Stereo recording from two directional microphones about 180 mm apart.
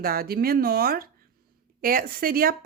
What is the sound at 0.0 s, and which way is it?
Speech, 55° right (ahead or behind).